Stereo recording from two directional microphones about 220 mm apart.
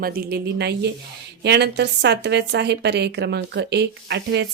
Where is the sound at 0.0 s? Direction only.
45° right (ahead or behind).